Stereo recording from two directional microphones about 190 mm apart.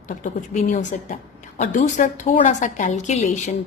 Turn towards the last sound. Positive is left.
turn(degrees=35)  # may be behind; listen again after turning